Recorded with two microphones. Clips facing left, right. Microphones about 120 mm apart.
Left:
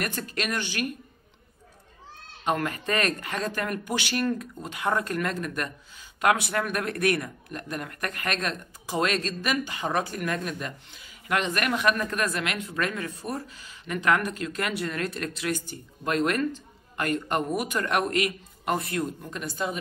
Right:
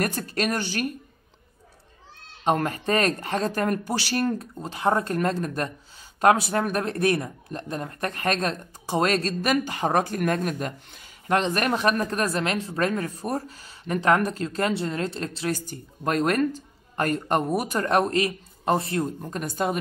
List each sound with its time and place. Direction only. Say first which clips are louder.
0.0 s a man's voice: right 5 dB; 40° right (ahead or behind)
2.4 s a man's voice: right 4 dB; 30° right (ahead or behind)
19.3 s a woman's voice: right 7 dB; 45° right (ahead or behind)